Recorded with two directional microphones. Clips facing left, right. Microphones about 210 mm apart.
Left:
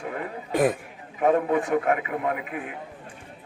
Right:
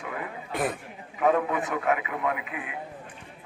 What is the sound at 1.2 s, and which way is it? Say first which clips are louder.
A man's voice: left 3 dB; 35° left (ahead or behind).